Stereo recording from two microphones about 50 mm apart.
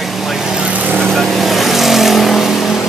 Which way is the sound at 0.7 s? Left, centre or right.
Right.